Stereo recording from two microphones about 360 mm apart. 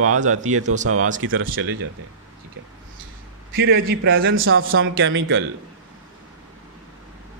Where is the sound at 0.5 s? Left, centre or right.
Centre.